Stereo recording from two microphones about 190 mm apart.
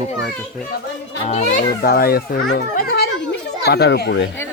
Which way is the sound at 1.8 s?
55° left (ahead or behind).